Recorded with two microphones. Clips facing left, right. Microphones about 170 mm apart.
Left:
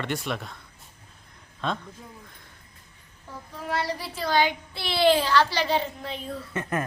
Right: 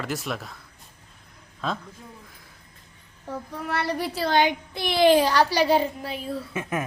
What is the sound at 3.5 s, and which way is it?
Child singing, 65° right (ahead or behind).